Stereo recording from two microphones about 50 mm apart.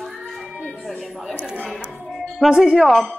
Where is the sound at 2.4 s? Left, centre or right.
Centre.